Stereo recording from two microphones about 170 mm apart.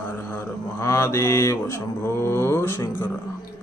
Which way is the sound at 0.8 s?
15° left (ahead or behind).